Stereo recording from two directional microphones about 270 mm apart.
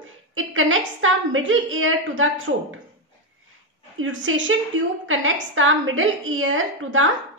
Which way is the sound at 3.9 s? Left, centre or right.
Right.